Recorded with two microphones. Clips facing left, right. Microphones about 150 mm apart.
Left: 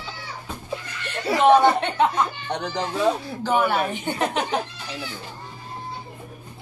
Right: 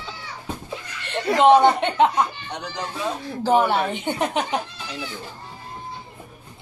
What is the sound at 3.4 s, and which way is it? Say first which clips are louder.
Speech: right 4 dB; 30° right (ahead or behind).